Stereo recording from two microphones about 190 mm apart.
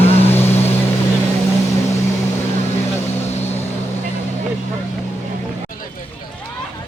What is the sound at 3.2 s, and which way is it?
Vehicle, 35° left (ahead or behind).